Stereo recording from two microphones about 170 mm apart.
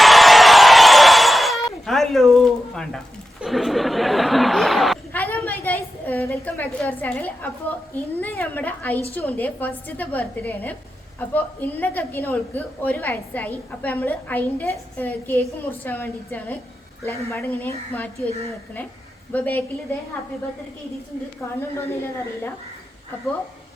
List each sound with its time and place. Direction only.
0.0 s a sound: centre (ahead or behind)
8.2 s a woman's voice: 10° left (ahead or behind)
19.3 s a woman's voice: 10° left (ahead or behind)